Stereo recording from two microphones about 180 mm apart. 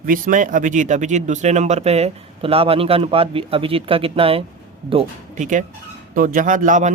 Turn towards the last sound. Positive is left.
turn(degrees=-45)  # may be behind; listen again after turning